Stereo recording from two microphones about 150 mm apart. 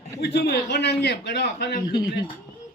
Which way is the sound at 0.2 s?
90° left.